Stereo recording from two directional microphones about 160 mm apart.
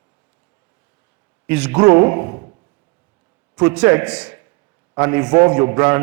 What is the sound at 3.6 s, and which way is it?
A man's voice, 10° right (ahead or behind).